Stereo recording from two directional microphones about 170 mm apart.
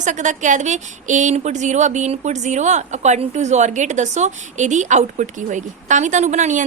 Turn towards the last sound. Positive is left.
turn(degrees=-45)  # may be behind; listen again after turning